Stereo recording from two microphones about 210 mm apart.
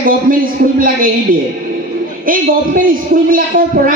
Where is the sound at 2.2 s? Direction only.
40° right (ahead or behind).